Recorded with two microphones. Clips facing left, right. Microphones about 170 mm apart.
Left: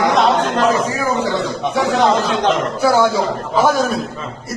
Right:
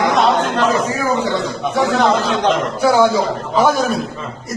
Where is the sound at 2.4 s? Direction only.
Centre (ahead or behind).